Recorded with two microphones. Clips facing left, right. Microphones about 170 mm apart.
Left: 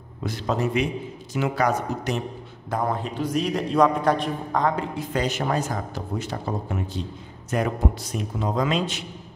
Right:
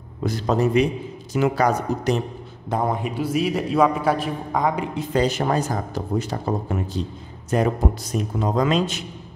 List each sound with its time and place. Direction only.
0.2 s a man's voice: 40° right (ahead or behind)
2.7 s a man's voice: 20° right (ahead or behind)
5.1 s a man's voice: 35° right (ahead or behind)
7.5 s a man's voice: 40° right (ahead or behind)